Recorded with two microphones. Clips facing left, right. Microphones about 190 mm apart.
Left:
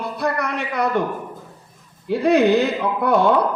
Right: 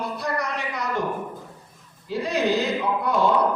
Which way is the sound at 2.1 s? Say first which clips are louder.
Left 8 dB; 60° left (ahead or behind).